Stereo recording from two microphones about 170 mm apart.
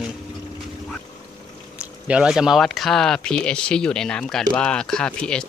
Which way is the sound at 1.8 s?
5° right (ahead or behind).